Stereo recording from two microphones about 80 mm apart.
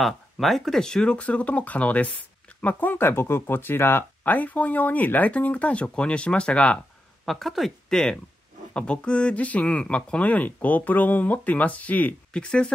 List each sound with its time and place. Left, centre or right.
0.0 s speech: centre
7.2 s speech: centre